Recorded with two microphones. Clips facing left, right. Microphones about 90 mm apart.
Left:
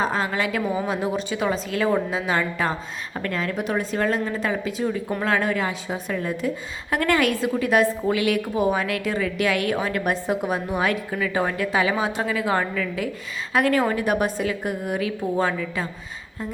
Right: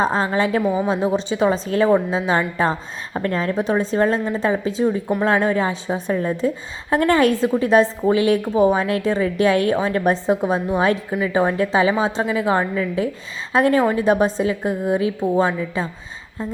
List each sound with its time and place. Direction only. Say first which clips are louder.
0.0 s a woman's voice: right 5 dB; 35° right (ahead or behind)
0.6 s a woman's voice: right 5 dB; 15° right (ahead or behind)